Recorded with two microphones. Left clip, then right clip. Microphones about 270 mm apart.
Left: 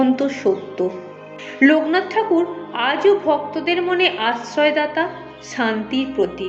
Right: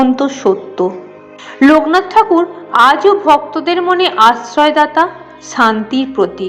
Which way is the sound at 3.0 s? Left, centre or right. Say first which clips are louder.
Right 7 dB; centre.